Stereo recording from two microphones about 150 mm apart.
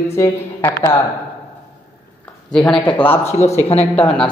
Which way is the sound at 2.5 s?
5° left (ahead or behind).